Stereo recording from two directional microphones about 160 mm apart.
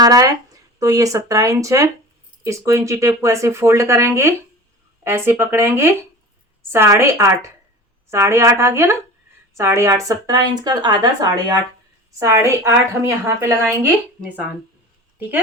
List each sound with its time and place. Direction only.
0.0 s speech: 20° right (ahead or behind)